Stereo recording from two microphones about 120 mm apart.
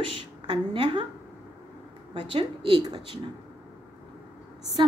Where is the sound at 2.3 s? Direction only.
45° right (ahead or behind).